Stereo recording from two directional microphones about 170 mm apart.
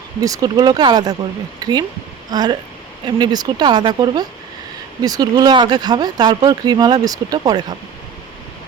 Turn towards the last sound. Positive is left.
turn(degrees=-25)  # may be behind; listen again after turning